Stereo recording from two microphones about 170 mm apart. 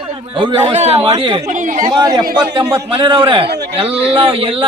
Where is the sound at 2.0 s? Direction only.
25° right (ahead or behind).